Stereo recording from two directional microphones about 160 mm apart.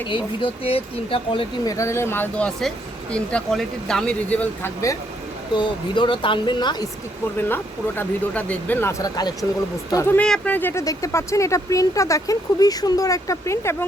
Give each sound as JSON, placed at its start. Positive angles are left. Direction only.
{"t": 0.1, "sound": "speech", "side_deg": 30}
{"t": 1.7, "sound": "speech", "side_deg": 15}
{"t": 5.5, "sound": "speech", "side_deg": 30}
{"t": 7.3, "sound": "speech", "side_deg": 15}